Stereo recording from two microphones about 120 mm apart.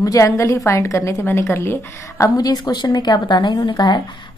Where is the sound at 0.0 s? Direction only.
25° left (ahead or behind).